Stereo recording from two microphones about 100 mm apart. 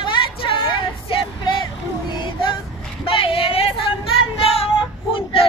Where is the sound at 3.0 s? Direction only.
65° left (ahead or behind).